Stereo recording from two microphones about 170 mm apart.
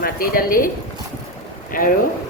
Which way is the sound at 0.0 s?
60° left (ahead or behind).